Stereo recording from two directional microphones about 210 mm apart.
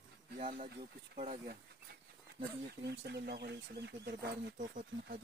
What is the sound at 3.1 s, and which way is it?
Speech, 50° right (ahead or behind).